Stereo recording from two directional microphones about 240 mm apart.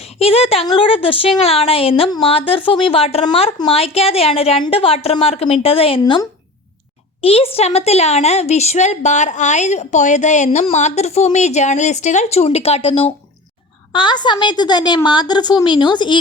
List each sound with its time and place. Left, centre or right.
0.0 s a woman's voice: left